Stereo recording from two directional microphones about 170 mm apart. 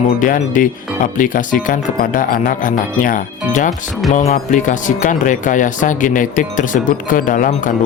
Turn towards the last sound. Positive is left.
turn(degrees=50)  # may be behind; listen again after turning